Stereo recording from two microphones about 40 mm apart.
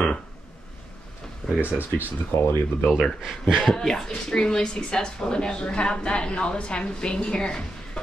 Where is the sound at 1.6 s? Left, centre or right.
Right.